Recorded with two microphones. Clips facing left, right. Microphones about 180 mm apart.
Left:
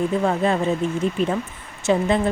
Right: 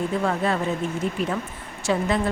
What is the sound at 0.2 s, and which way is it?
Speech, 20° left (ahead or behind).